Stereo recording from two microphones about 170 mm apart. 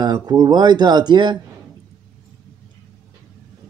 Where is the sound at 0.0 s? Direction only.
25° right (ahead or behind).